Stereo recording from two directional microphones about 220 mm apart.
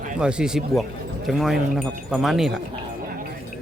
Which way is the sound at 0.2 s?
5° right (ahead or behind).